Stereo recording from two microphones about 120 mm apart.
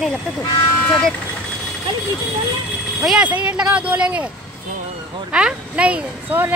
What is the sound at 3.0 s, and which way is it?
Speech, 10° right (ahead or behind).